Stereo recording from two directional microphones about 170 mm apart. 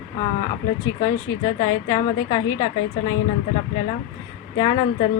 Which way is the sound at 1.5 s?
25° left (ahead or behind).